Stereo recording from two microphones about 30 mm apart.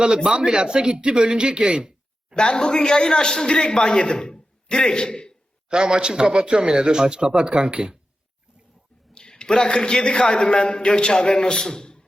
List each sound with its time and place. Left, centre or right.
0.4 s speech: right
2.3 s a man's voice: left
5.6 s speech: right
9.1 s a man's voice: left